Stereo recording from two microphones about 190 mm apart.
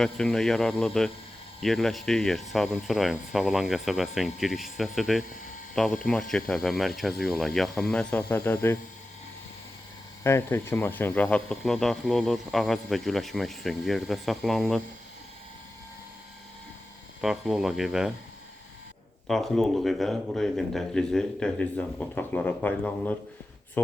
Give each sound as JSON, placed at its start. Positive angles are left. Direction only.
{"t": 0.0, "sound": "speech", "side_deg": 5}
{"t": 10.2, "sound": "speech", "side_deg": 15}
{"t": 17.2, "sound": "speech", "side_deg": 0}
{"t": 19.3, "sound": "speech", "side_deg": 0}